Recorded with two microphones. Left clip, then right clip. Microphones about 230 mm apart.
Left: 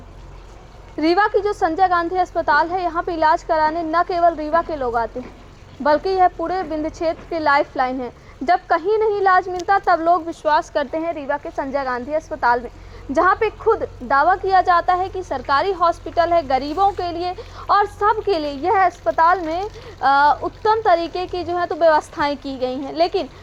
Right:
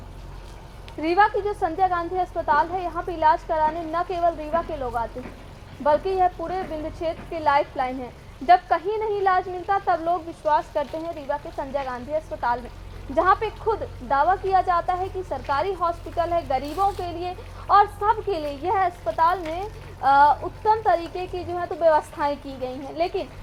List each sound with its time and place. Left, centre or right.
0.9 s a woman's voice: left